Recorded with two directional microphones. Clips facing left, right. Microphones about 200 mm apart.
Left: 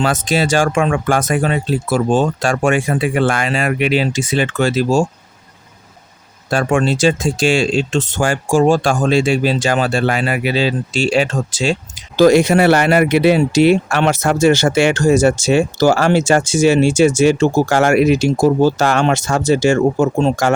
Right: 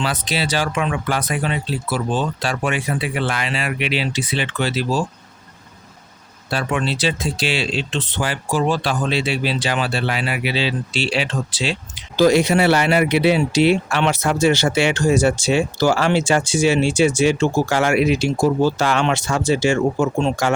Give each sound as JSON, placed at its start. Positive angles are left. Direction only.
{"t": 0.0, "sound": "speech", "side_deg": 45}
{"t": 6.5, "sound": "speech", "side_deg": 45}